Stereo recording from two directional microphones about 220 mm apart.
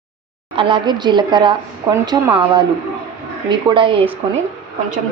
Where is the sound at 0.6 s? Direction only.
20° right (ahead or behind).